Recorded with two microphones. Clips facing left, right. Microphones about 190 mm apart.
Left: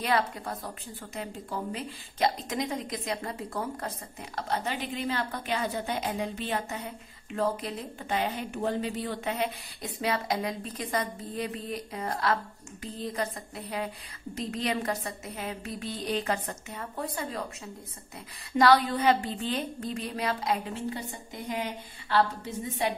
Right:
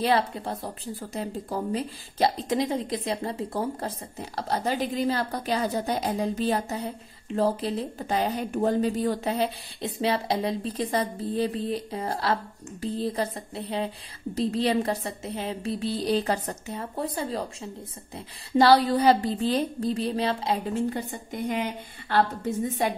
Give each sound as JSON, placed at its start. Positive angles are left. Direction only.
{"t": 0.0, "sound": "a woman's voice", "side_deg": -30}
{"t": 20.9, "sound": "a woman's voice", "side_deg": -55}